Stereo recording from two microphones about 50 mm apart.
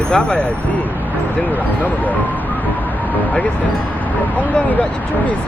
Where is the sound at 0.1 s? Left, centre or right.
Centre.